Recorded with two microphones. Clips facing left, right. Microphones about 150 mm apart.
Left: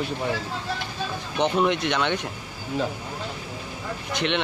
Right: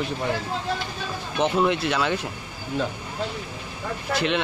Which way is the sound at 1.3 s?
Centre (ahead or behind).